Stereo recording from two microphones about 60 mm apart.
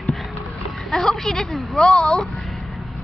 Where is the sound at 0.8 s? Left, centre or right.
Centre.